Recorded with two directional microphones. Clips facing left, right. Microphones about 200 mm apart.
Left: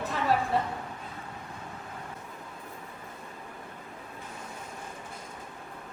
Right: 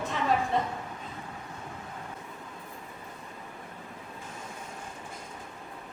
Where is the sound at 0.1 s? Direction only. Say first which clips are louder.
Even; 5° left (ahead or behind).